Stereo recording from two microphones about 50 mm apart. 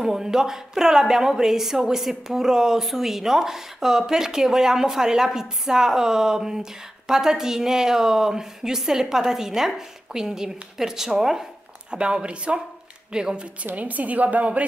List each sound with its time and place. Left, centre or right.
0.0 s a woman's voice: centre
11.9 s a woman's voice: centre
13.7 s a woman's voice: right